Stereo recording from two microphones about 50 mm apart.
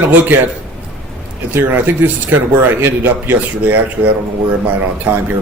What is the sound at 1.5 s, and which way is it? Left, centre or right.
Speech, right.